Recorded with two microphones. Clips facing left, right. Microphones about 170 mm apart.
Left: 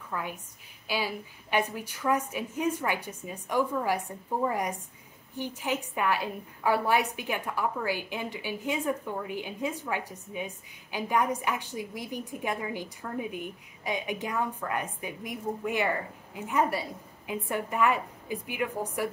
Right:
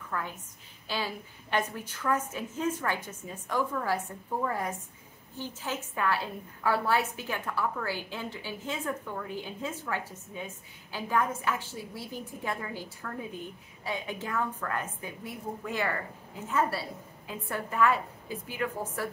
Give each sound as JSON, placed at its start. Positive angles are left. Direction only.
{"t": 0.1, "sound": "a woman's voice", "side_deg": 15}